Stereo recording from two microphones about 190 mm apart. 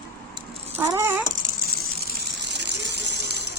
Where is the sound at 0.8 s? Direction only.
15° right (ahead or behind).